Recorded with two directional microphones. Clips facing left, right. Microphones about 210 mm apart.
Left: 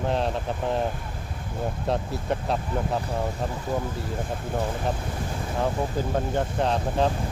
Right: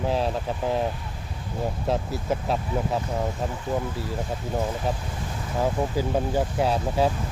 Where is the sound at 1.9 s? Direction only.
Centre (ahead or behind).